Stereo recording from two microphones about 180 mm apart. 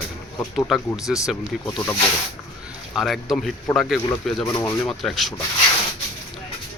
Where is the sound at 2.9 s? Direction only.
Centre (ahead or behind).